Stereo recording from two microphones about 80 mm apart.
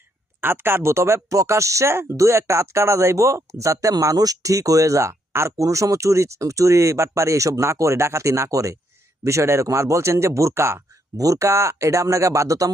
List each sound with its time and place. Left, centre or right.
0.4 s speech: right